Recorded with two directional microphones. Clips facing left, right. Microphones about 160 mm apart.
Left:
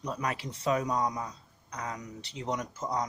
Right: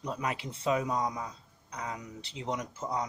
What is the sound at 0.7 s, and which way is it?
Speech, 35° left (ahead or behind).